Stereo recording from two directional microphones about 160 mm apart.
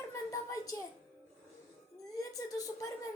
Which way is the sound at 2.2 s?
20° left (ahead or behind).